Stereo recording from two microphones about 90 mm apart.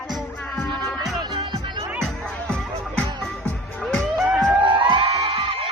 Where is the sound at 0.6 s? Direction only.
55° right (ahead or behind).